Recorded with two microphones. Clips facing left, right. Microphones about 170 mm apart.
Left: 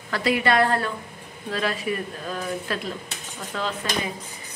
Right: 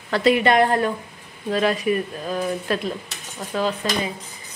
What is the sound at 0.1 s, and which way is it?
Speech, 20° right (ahead or behind).